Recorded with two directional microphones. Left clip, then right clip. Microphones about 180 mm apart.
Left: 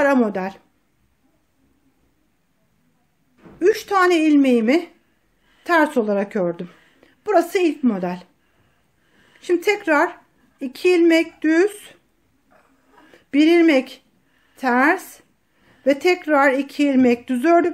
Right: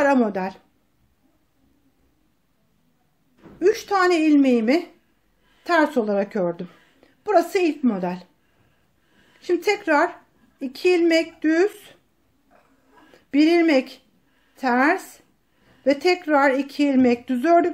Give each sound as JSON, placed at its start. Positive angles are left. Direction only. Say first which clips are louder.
{"t": 0.0, "sound": "speech", "louder": "left 2 dB", "side_deg": 15}
{"t": 3.5, "sound": "a woman's voice", "louder": "left 2 dB", "side_deg": 20}
{"t": 9.4, "sound": "speech", "louder": "left 2 dB", "side_deg": 20}
{"t": 13.1, "sound": "a woman's voice", "louder": "left 2 dB", "side_deg": 20}